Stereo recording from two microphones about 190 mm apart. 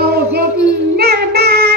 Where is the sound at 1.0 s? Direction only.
55° right (ahead or behind).